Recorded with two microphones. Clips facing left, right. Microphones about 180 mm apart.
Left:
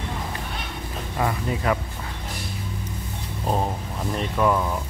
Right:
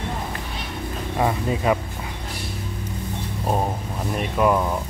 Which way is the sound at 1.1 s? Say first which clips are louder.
Right 3 dB; 20° right (ahead or behind).